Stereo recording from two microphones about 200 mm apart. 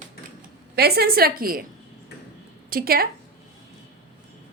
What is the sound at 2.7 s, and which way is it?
Speech, 45° right (ahead or behind).